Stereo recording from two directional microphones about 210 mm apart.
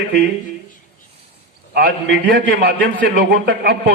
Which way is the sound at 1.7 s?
45° right (ahead or behind).